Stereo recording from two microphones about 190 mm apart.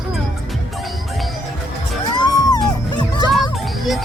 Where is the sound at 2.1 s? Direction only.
20° left (ahead or behind).